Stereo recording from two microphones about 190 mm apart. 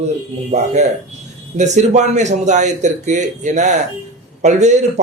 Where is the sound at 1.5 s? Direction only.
40° right (ahead or behind).